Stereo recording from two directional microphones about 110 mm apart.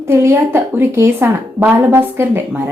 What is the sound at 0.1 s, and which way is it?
A woman's voice, 20° right (ahead or behind).